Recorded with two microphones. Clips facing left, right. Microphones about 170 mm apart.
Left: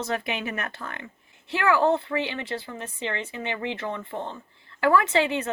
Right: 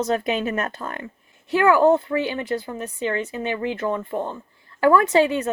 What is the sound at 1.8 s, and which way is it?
Speech, 45° right (ahead or behind).